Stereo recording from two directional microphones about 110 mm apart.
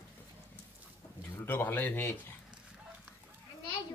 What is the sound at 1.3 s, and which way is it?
Pigeon, 20° left (ahead or behind).